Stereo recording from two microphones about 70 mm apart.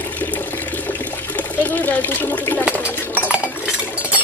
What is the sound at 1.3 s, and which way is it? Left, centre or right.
Speech, left.